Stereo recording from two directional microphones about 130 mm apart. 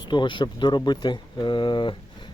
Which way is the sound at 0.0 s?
35° left (ahead or behind).